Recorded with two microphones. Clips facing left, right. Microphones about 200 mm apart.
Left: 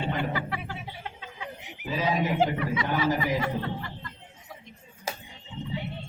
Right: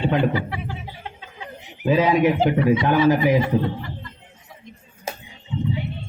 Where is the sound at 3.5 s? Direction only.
90° right.